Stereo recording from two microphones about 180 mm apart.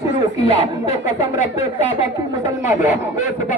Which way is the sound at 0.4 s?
40° left (ahead or behind).